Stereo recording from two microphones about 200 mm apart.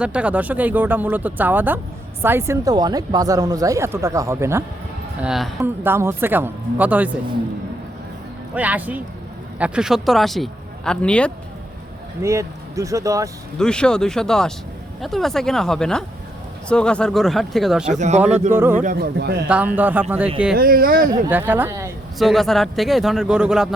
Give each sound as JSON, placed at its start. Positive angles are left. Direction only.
{"t": 0.0, "sound": "speech", "side_deg": -5}
{"t": 8.5, "sound": "speech", "side_deg": -10}
{"t": 12.2, "sound": "speech", "side_deg": -15}
{"t": 13.6, "sound": "speech", "side_deg": 5}
{"t": 17.9, "sound": "speech", "side_deg": -35}
{"t": 18.2, "sound": "speech", "side_deg": -10}
{"t": 18.8, "sound": "a man's voice", "side_deg": -45}
{"t": 19.5, "sound": "speech", "side_deg": -5}
{"t": 20.6, "sound": "a man's voice", "side_deg": -45}
{"t": 21.1, "sound": "speech", "side_deg": -10}
{"t": 22.2, "sound": "speech", "side_deg": 0}